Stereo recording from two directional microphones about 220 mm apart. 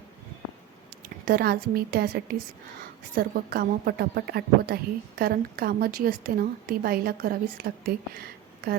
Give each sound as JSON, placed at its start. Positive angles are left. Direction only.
{"t": 1.2, "sound": "a woman's voice", "side_deg": -45}